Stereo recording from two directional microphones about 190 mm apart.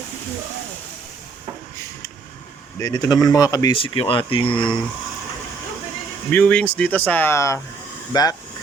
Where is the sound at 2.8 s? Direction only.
20° left (ahead or behind).